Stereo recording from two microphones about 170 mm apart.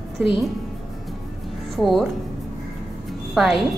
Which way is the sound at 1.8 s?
Centre (ahead or behind).